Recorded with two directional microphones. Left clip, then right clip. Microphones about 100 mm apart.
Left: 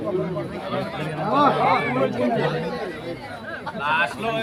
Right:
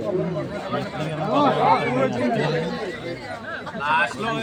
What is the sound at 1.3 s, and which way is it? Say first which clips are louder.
Speech: even; centre (ahead or behind).